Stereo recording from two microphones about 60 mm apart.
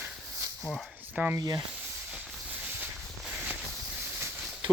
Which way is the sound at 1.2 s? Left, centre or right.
Right.